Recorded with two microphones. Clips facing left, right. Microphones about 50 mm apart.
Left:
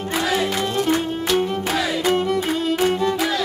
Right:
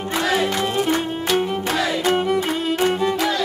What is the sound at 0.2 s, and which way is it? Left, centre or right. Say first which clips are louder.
Music: right 2 dB; centre.